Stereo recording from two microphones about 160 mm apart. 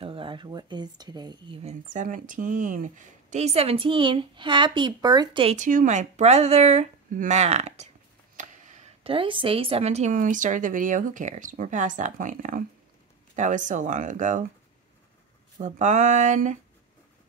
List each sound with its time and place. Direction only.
0.0 s speech: 35° right (ahead or behind)
1.6 s speech: 45° right (ahead or behind)
5.6 s speech: 50° right (ahead or behind)
15.5 s speech: 50° right (ahead or behind)